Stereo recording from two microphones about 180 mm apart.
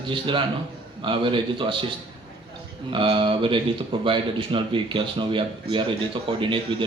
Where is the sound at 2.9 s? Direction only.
30° right (ahead or behind).